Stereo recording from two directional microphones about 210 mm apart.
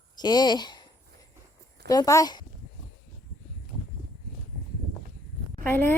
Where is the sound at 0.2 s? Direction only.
20° left (ahead or behind).